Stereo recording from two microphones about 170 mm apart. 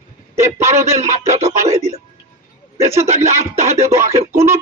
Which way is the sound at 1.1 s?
40° right (ahead or behind).